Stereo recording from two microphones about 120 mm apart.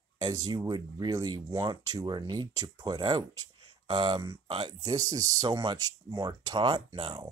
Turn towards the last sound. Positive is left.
turn(degrees=-45)  # may be behind; listen again after turning